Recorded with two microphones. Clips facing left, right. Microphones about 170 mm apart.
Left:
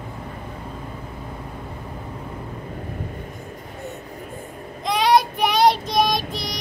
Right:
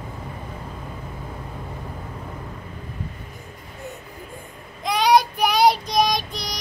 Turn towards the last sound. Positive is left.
turn(degrees=0)  # may be behind; listen again after turning